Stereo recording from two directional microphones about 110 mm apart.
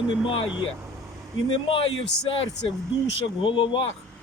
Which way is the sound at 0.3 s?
55° left (ahead or behind).